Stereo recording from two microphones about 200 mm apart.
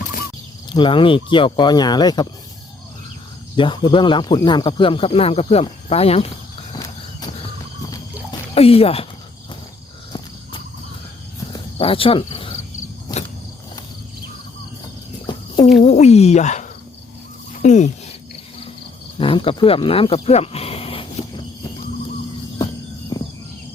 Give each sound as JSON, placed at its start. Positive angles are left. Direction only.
{"t": 0.7, "sound": "speech", "side_deg": 25}
{"t": 3.5, "sound": "speech", "side_deg": 25}
{"t": 8.3, "sound": "dog", "side_deg": 30}
{"t": 11.8, "sound": "cricket", "side_deg": 25}
{"t": 13.1, "sound": "a sound", "side_deg": 20}
{"t": 15.3, "sound": "a sound", "side_deg": 25}
{"t": 15.8, "sound": "speech", "side_deg": 35}
{"t": 19.2, "sound": "speech", "side_deg": 25}